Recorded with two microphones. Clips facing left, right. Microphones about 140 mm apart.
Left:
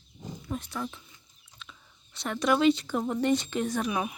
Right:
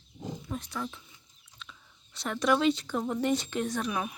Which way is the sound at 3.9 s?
15° left (ahead or behind).